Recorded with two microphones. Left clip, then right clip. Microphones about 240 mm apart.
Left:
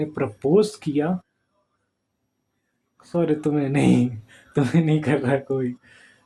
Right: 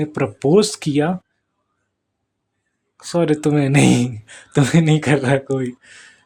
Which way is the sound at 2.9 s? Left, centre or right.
Right.